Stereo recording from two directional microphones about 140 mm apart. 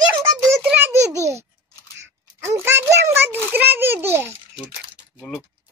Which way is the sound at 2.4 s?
20° right (ahead or behind).